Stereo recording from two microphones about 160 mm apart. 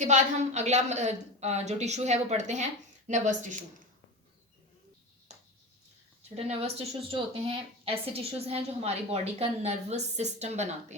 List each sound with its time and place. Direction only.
0.0 s a woman's voice: 50° right (ahead or behind)
6.3 s a woman's voice: 40° right (ahead or behind)